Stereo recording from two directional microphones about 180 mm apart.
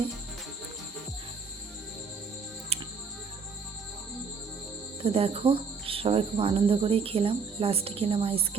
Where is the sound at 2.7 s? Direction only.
35° right (ahead or behind).